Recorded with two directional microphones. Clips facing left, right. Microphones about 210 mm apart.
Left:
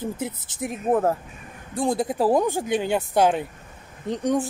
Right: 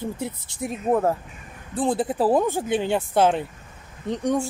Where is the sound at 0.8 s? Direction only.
Centre (ahead or behind).